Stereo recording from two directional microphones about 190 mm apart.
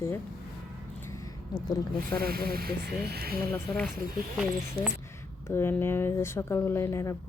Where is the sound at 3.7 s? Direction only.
Centre (ahead or behind).